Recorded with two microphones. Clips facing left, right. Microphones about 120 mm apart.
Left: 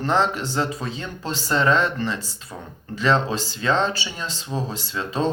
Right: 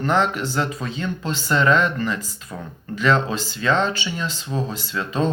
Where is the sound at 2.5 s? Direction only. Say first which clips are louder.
Right 3 dB; 15° left (ahead or behind).